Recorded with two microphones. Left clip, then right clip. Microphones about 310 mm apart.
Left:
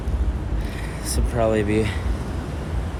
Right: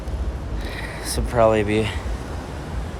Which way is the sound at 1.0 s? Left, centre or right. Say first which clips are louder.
Right 5 dB; right.